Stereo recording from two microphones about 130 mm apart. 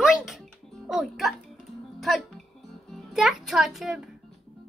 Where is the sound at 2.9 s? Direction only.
Centre (ahead or behind).